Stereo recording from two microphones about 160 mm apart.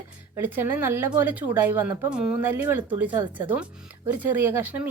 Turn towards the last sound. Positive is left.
turn(degrees=-10)  # may be behind; listen again after turning